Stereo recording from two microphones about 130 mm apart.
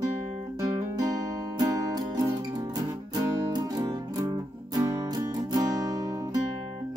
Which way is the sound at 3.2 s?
30° right (ahead or behind).